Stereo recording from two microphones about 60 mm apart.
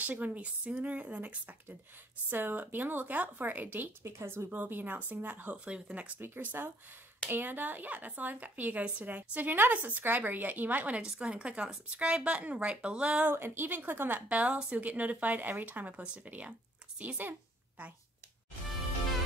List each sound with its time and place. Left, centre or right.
0.0 s speech: right
2.2 s speech: right
4.0 s speech: right
4.5 s speech: right
6.2 s speech: right
11.0 s speech: centre
13.2 s speech: right